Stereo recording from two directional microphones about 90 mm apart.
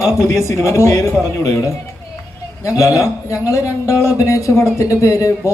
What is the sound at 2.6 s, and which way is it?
A man's voice, 35° left (ahead or behind).